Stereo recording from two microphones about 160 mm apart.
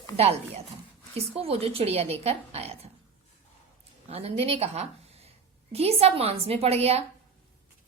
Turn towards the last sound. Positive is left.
turn(degrees=-40)  # may be behind; listen again after turning